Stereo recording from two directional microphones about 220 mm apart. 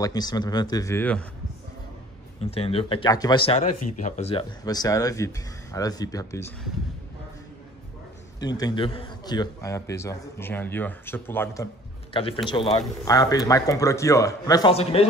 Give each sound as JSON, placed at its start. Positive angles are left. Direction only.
{"t": 0.0, "sound": "speech", "side_deg": 20}
{"t": 2.4, "sound": "speech", "side_deg": 25}
{"t": 4.0, "sound": "speech", "side_deg": 30}
{"t": 8.4, "sound": "speech", "side_deg": 20}